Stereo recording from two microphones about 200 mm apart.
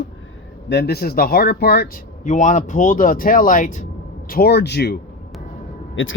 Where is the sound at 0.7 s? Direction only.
55° left (ahead or behind).